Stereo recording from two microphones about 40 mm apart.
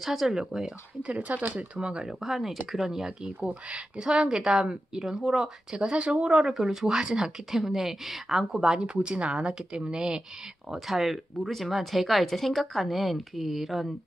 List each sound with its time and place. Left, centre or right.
0.0 s speech: centre
1.0 s speech: right
1.8 s speech: right
2.2 s speech: centre
3.3 s speech: right
4.0 s speech: right
5.9 s speech: right
6.3 s speech: centre
8.5 s speech: centre
10.7 s speech: centre